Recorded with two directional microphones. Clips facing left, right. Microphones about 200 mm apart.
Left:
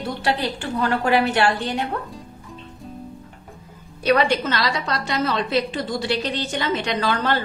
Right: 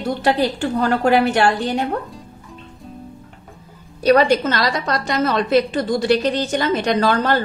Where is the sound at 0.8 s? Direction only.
40° right (ahead or behind).